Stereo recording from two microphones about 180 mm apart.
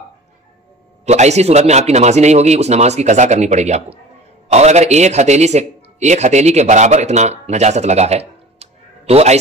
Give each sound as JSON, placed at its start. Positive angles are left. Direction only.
{"t": 1.0, "sound": "a man's voice", "side_deg": -40}